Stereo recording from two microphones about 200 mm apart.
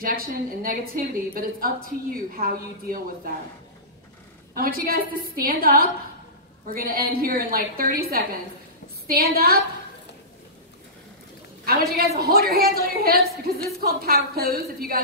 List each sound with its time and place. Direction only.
0.0 s a woman's voice: 45° right (ahead or behind)
4.6 s a woman's voice: 50° right (ahead or behind)
11.6 s a woman's voice: 50° right (ahead or behind)